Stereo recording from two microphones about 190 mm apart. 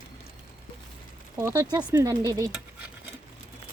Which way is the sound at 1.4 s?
15° right (ahead or behind).